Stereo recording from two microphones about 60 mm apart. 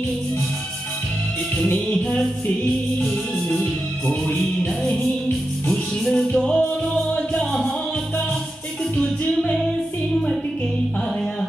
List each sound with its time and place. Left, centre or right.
1.6 s music: left
6.0 s music: centre
8.9 s music: centre